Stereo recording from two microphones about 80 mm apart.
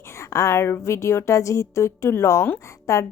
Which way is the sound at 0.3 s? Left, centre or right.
Left.